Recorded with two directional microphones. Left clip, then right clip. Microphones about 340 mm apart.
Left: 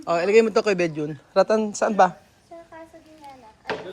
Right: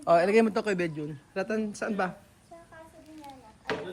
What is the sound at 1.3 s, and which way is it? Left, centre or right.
Speech, left.